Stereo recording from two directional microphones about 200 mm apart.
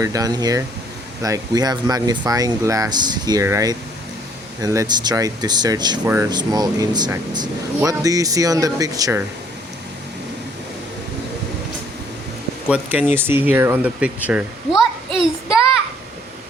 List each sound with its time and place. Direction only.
0.0 s speech: 15° right (ahead or behind)
12.6 s speech: 5° right (ahead or behind)